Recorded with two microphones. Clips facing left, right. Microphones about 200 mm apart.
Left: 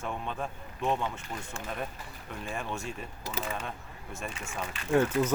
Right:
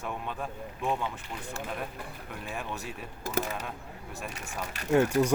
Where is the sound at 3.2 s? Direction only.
50° right (ahead or behind).